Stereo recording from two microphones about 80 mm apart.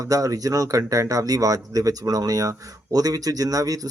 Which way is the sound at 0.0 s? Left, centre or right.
Right.